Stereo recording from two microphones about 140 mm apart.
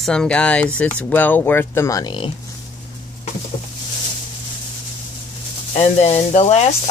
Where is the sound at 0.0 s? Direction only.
5° left (ahead or behind); by 2.3 s 35° left (ahead or behind).